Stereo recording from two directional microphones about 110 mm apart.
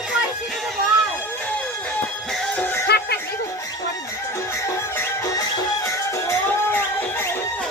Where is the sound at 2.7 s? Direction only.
25° left (ahead or behind).